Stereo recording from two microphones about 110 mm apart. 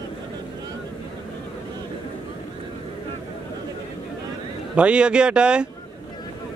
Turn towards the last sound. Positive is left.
turn(degrees=-10)  # may be behind; listen again after turning